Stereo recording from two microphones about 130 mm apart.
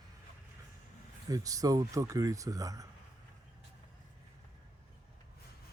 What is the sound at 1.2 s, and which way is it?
Speech, 25° right (ahead or behind).